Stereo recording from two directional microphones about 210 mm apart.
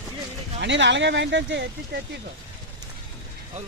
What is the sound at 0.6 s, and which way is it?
Speech, 60° right (ahead or behind).